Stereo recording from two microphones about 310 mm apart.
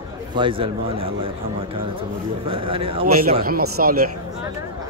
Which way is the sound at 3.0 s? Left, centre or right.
Right.